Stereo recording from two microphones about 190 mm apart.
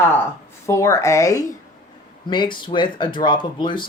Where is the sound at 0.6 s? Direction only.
15° left (ahead or behind).